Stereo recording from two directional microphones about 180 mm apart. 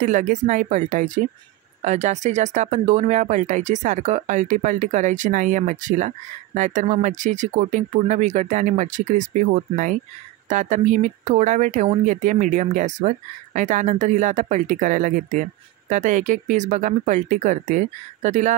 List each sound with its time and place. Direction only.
0.0 s speech: 45° right (ahead or behind)